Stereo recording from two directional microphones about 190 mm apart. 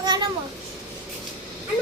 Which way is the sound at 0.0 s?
20° right (ahead or behind).